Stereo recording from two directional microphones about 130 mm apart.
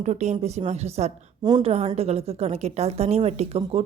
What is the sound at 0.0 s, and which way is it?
Speech, 60° right (ahead or behind).